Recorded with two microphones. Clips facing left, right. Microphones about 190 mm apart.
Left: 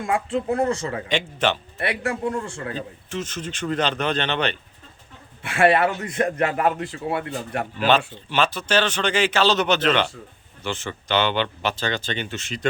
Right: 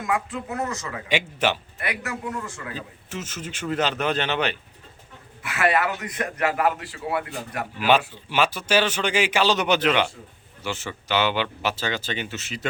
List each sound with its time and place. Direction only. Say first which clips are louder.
0.0 s a man's voice: left 4 dB; 30° left (ahead or behind)
1.0 s speech: even; 10° right (ahead or behind)
1.8 s a man's voice: left 8 dB; 30° left (ahead or behind)
3.1 s speech: left 3 dB; 5° right (ahead or behind)
5.4 s a man's voice: left 5 dB; 30° left (ahead or behind)
7.8 s speech: even; 10° right (ahead or behind)